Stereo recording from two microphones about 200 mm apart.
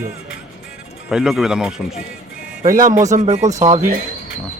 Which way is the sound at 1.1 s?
Centre (ahead or behind).